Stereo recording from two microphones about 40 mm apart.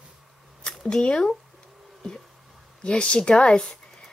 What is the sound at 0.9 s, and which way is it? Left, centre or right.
Speech, left.